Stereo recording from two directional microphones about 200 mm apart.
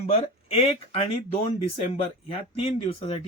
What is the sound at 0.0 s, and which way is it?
Speech, 30° left (ahead or behind).